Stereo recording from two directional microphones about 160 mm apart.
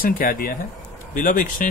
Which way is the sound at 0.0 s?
60° left (ahead or behind).